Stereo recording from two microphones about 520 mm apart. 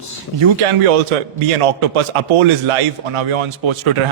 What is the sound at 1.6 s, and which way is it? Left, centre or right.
A man's voice, right.